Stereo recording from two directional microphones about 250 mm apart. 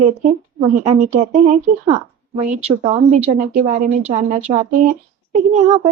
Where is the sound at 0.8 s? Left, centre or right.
Right.